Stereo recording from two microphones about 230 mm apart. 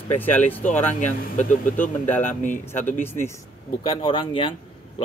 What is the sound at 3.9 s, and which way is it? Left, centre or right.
Speech, left.